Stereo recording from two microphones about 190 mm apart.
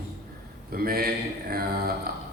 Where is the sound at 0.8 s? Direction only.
50° right (ahead or behind).